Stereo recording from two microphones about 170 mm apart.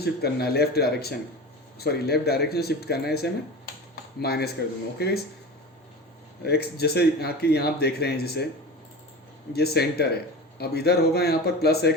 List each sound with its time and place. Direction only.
0.0 s speech: 70° left (ahead or behind)
6.4 s speech: 70° left (ahead or behind)
9.5 s speech: 70° left (ahead or behind)